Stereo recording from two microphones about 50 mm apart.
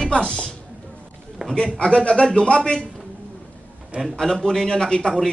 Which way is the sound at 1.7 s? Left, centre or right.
Left.